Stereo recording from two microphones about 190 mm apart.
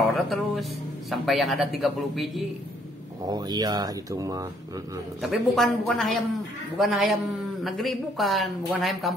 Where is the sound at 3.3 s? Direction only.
20° right (ahead or behind).